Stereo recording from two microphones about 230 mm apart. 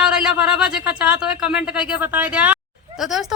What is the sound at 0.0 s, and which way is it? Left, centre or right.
A woman's voice, centre.